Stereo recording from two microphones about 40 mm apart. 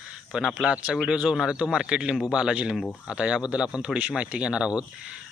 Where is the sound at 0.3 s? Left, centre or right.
Centre.